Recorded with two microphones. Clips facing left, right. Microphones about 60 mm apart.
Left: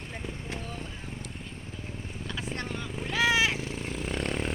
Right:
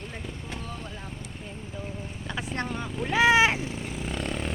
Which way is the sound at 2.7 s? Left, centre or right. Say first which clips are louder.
Right 5 dB; right.